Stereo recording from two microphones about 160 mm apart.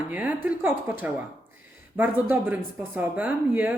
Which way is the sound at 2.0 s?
10° right (ahead or behind).